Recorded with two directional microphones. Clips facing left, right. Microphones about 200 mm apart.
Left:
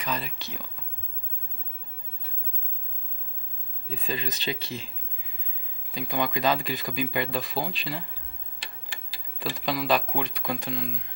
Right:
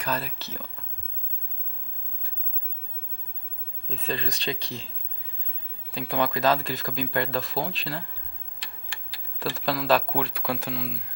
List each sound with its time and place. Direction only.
0.1 s speech: 5° right (ahead or behind)
3.9 s speech: centre (ahead or behind)
5.9 s speech: centre (ahead or behind)
9.4 s speech: centre (ahead or behind)